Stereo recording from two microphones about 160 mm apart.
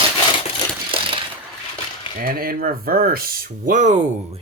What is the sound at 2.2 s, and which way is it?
Speech, 65° right (ahead or behind).